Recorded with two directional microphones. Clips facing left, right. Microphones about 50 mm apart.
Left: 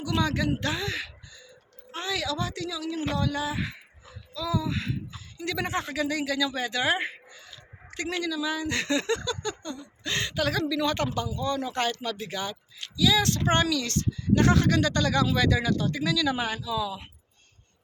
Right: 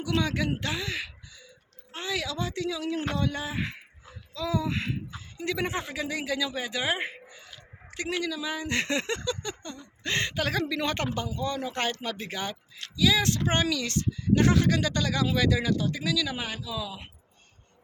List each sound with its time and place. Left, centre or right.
0.0 s a woman's voice: right
5.4 s speech: centre
8.4 s a woman's voice: right
9.7 s a woman's voice: right; by 17.1 s centre